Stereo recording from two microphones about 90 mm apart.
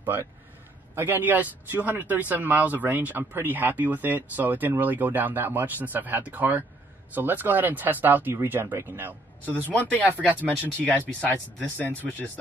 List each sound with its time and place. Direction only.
0.0 s speech: 25° right (ahead or behind)
9.5 s speech: 15° left (ahead or behind)